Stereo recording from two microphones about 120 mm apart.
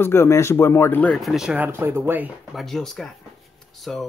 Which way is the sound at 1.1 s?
Centre (ahead or behind).